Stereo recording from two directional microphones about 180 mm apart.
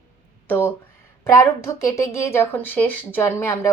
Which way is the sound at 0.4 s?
10° left (ahead or behind).